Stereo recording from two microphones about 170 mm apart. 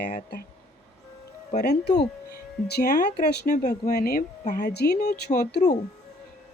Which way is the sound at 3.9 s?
65° left (ahead or behind).